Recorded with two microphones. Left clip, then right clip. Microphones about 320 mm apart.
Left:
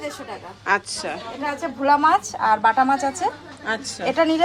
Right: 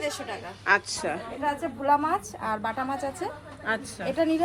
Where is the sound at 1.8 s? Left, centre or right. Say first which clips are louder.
Left 7 dB; left.